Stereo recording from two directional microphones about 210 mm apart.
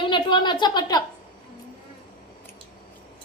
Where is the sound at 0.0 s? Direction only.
20° left (ahead or behind).